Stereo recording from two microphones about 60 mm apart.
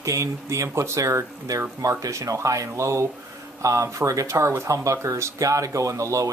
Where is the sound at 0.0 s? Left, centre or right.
Right.